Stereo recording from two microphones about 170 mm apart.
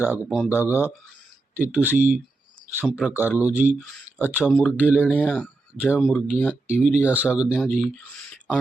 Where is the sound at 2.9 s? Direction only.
Centre (ahead or behind).